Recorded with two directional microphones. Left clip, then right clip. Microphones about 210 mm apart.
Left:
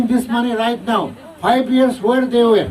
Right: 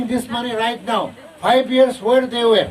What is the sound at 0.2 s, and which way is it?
Speech, centre (ahead or behind).